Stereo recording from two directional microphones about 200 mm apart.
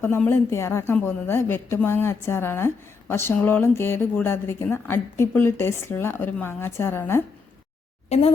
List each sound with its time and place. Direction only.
0.0 s a woman's voice: 10° left (ahead or behind)
8.1 s speech: 35° left (ahead or behind)